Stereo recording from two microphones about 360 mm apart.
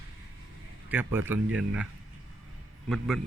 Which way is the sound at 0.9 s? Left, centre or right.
Centre.